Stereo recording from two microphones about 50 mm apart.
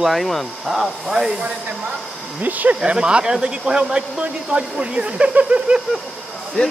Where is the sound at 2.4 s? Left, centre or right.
Right.